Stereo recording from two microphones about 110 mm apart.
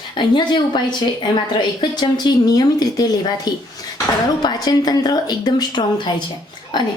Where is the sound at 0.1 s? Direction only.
45° left (ahead or behind).